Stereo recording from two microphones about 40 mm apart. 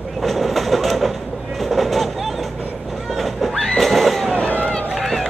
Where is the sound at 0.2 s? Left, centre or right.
Centre.